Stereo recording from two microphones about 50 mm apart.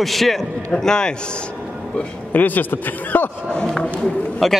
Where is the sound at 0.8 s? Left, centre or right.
Centre.